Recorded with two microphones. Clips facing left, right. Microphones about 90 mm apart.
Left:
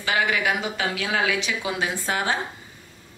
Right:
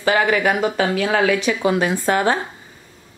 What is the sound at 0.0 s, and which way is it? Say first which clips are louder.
Speech: right 6 dB; 40° right (ahead or behind).